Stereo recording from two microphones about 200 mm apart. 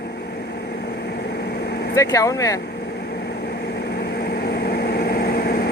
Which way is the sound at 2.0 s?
15° left (ahead or behind).